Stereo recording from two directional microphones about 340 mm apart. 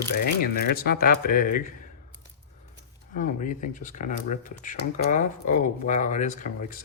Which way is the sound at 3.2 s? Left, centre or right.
Left.